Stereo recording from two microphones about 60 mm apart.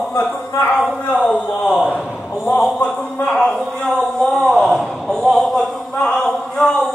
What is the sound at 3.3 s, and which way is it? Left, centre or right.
Speech, centre.